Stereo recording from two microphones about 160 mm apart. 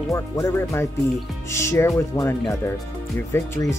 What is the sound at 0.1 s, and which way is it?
Speech, 20° left (ahead or behind).